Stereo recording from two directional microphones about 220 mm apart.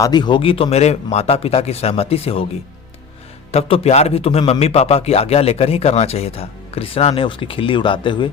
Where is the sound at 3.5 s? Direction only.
25° left (ahead or behind).